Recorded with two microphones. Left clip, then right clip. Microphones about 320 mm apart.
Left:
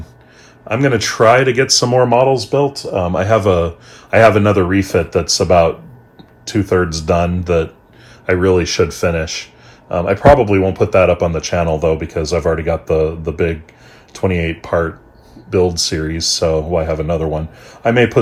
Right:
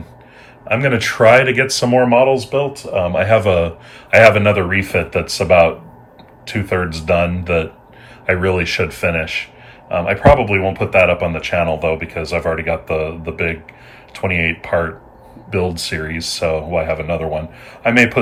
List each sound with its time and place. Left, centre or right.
0.7 s speech: centre
1.9 s speech: left
2.3 s speech: centre